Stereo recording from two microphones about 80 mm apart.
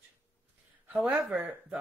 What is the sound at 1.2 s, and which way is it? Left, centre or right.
Speech, centre.